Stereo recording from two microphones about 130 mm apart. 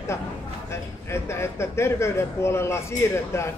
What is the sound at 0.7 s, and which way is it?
Speech, 20° left (ahead or behind).